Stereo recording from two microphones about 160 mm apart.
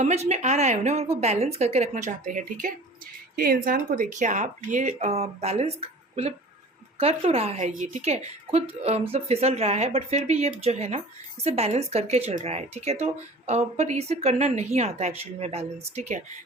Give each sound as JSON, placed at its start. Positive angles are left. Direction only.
{"t": 0.0, "sound": "speech", "side_deg": -45}
{"t": 3.3, "sound": "a woman's voice", "side_deg": -65}
{"t": 7.7, "sound": "a woman's voice", "side_deg": -55}